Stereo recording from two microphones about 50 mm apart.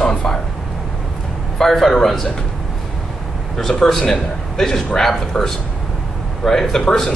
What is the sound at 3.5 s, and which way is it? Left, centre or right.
A man's voice, centre.